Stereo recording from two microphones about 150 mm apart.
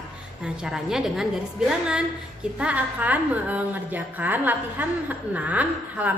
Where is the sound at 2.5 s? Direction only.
10° right (ahead or behind).